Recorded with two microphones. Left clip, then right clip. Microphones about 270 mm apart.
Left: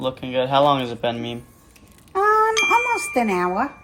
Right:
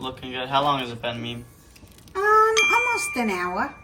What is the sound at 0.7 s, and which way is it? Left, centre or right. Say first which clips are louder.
Speech: left 5 dB; left.